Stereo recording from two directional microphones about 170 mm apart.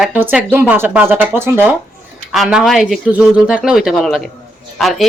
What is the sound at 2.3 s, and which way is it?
A man's voice, centre (ahead or behind).